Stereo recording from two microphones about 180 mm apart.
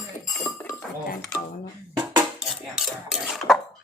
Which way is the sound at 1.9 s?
25° right (ahead or behind).